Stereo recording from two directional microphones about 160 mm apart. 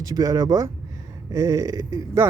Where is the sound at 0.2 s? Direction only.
25° right (ahead or behind).